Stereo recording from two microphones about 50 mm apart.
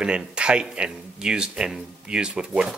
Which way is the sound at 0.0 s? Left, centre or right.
Centre.